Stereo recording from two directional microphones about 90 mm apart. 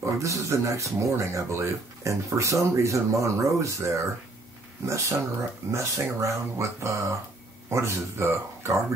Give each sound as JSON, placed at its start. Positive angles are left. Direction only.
{"t": 0.0, "sound": "speech", "side_deg": -35}